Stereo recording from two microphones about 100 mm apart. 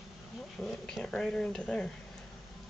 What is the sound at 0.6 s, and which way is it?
Speech, 5° left (ahead or behind).